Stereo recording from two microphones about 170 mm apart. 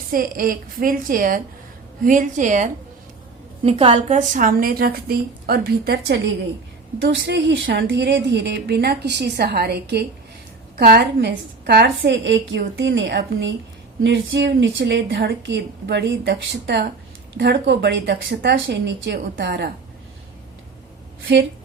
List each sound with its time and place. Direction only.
0.1 s a woman's voice: 55° right (ahead or behind)
3.6 s a woman's voice: 35° right (ahead or behind); by 6.2 s 75° right (ahead or behind)
7.0 s a woman's voice: 90° right; by 19.7 s 70° right (ahead or behind)